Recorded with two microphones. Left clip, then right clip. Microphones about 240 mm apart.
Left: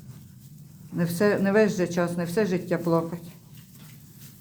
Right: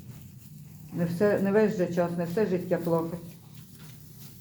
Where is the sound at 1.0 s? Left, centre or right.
Left.